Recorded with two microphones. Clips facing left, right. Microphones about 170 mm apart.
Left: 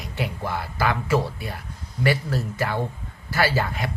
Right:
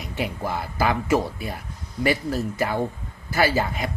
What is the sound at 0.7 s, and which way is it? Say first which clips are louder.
Speech: right 1 dB; 20° right (ahead or behind).